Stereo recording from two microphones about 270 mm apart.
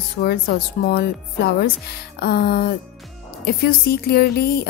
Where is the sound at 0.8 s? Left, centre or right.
Left.